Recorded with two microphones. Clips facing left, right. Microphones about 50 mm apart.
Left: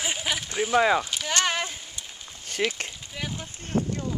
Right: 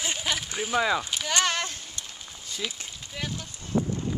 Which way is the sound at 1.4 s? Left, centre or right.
Centre.